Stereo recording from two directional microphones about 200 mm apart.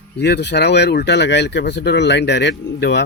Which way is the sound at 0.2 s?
55° left (ahead or behind).